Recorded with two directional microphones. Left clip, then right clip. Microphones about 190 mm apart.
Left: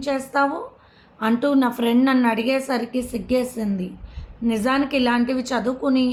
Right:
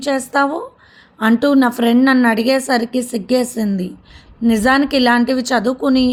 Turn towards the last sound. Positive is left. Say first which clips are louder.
# right 6 dB
turn(degrees=-45)  # may be behind; listen again after turning